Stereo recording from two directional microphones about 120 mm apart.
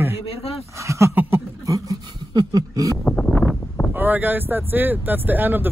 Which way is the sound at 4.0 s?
15° right (ahead or behind).